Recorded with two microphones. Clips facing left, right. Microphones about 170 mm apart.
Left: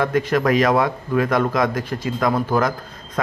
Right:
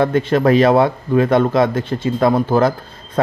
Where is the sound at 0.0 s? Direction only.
30° right (ahead or behind).